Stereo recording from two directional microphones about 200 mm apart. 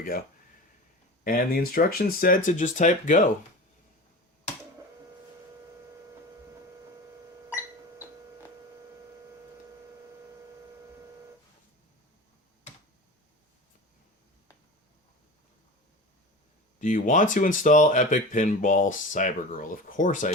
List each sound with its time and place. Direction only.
1.2 s speech: 45° left (ahead or behind)
16.8 s speech: 40° left (ahead or behind)